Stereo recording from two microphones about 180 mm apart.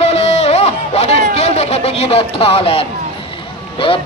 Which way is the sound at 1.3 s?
35° left (ahead or behind).